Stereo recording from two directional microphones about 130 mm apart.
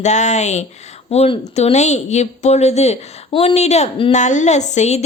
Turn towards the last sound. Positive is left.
turn(degrees=65)  # may be behind; listen again after turning